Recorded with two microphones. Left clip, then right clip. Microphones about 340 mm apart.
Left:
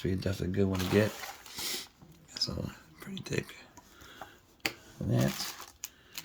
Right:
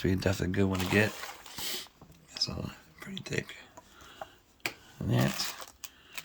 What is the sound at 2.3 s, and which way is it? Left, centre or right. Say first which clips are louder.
Speech: right 1 dB; centre.